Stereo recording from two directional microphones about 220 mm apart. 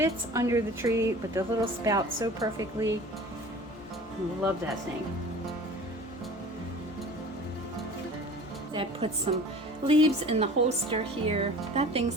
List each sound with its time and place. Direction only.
0.0 s a woman's voice: 15° right (ahead or behind)
8.7 s speech: 25° right (ahead or behind)